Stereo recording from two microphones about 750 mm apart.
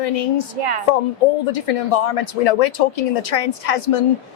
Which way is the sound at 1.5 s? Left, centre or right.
Left.